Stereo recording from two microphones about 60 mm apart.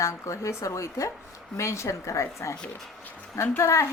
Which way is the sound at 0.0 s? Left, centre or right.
Left.